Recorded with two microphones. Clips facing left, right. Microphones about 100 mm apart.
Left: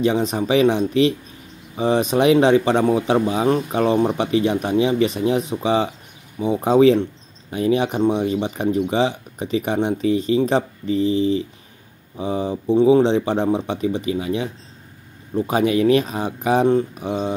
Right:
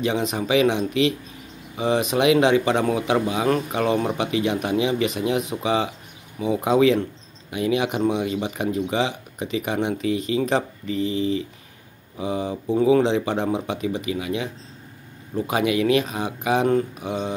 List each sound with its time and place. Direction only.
0.0 s speech: 35° left (ahead or behind)
16.6 s mantra: 25° left (ahead or behind)